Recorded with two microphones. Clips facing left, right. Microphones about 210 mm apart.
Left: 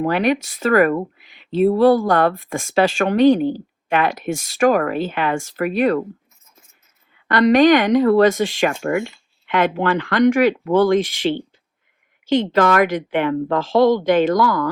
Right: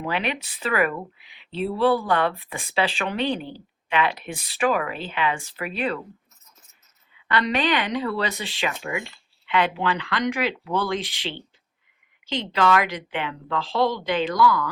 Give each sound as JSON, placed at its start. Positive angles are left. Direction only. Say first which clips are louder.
{"t": 0.0, "sound": "speech", "louder": "left 9 dB", "side_deg": 45}
{"t": 7.1, "sound": "speech", "louder": "left 10 dB", "side_deg": 45}